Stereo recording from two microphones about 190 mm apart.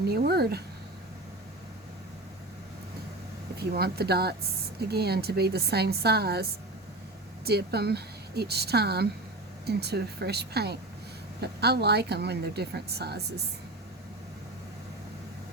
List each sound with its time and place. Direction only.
0.1 s speech: 55° right (ahead or behind)
3.6 s speech: 55° right (ahead or behind)